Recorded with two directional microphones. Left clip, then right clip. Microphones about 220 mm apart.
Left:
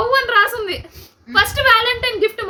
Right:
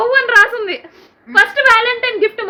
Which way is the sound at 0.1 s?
25° left (ahead or behind).